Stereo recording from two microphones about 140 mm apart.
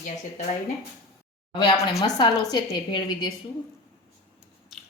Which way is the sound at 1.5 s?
35° left (ahead or behind).